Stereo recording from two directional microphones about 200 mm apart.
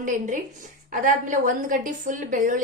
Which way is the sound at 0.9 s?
40° right (ahead or behind).